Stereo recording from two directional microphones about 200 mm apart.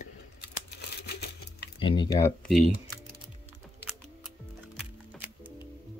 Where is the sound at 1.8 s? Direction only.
25° left (ahead or behind).